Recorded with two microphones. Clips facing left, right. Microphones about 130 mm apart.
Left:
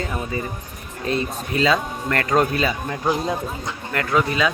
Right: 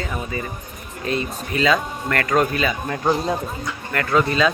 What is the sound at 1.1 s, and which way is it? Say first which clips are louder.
Speech: left 1 dB; 30° left (ahead or behind).